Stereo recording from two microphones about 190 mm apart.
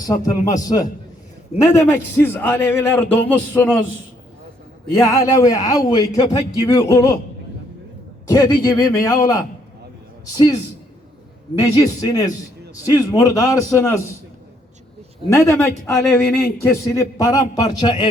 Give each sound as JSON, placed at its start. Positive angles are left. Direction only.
{"t": 0.0, "sound": "a man's voice", "side_deg": 20}
{"t": 4.9, "sound": "speech", "side_deg": 15}
{"t": 8.3, "sound": "speech", "side_deg": 20}
{"t": 11.6, "sound": "a man's voice", "side_deg": 20}
{"t": 15.3, "sound": "a man's voice", "side_deg": 15}